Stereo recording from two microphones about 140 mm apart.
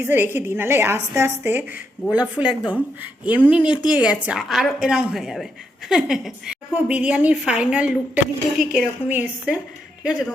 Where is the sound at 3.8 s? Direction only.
5° right (ahead or behind).